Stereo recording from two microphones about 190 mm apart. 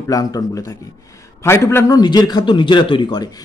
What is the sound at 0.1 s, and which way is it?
A man's voice, 20° left (ahead or behind).